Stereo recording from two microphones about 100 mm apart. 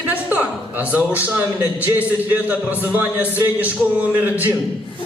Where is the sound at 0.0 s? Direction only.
15° right (ahead or behind).